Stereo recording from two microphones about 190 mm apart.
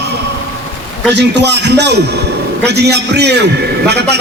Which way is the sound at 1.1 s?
60° right (ahead or behind).